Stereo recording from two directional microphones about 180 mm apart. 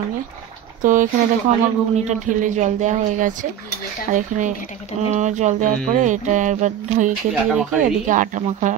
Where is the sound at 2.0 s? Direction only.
40° right (ahead or behind).